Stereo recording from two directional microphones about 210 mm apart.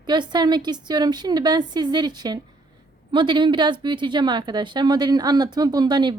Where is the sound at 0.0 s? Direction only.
20° right (ahead or behind).